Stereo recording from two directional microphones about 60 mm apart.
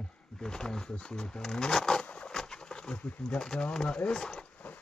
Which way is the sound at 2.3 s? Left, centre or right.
Centre.